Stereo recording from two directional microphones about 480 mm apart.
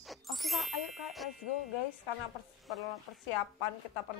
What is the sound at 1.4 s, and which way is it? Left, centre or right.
Speech, left.